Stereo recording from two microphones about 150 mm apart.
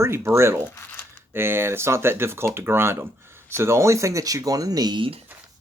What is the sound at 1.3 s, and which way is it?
Speech, 15° right (ahead or behind).